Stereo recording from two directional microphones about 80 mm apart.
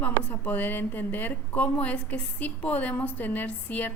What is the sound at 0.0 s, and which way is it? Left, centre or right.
A woman's voice, left.